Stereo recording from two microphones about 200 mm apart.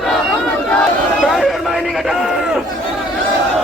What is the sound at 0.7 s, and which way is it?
A man's voice, 5° left (ahead or behind).